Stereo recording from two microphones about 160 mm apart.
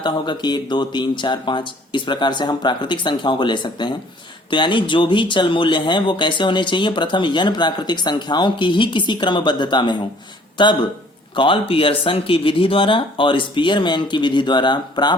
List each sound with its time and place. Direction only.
0.0 s speech: 30° left (ahead or behind)